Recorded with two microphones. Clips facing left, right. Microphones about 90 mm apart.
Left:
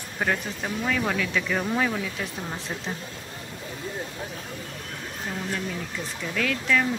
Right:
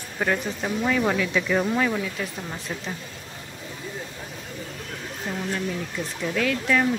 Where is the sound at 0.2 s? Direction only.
Centre (ahead or behind).